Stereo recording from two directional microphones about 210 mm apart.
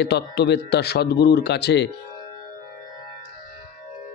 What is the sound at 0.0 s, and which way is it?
Speech, 50° left (ahead or behind).